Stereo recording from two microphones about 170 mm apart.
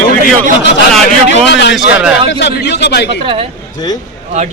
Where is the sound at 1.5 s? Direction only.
90° left.